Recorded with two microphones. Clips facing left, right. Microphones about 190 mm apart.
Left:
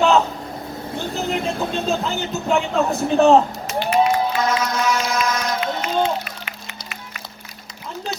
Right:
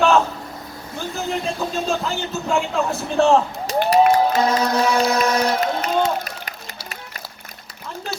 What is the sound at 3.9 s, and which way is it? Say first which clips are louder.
Crowd: right 3 dB; 35° right (ahead or behind).